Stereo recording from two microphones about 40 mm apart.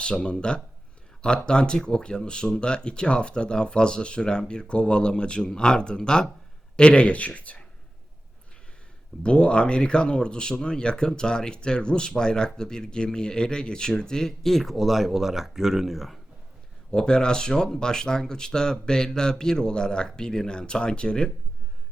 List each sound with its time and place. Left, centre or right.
0.0 s speech: left
9.2 s speech: left; by 16.1 s centre
16.9 s speech: centre